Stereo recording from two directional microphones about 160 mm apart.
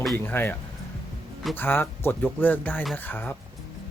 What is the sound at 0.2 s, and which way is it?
Speech, 15° left (ahead or behind).